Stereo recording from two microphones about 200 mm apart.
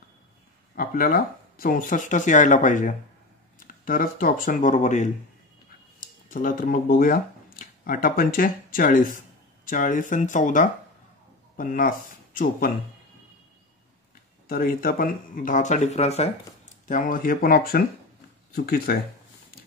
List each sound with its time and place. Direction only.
0.7 s speech: 45° left (ahead or behind)
14.5 s speech: 45° left (ahead or behind)